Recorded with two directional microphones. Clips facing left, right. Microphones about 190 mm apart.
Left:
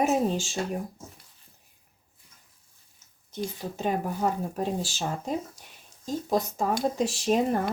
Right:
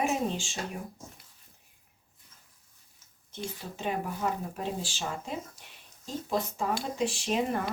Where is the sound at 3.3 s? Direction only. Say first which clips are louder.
Left 6 dB; 40° left (ahead or behind).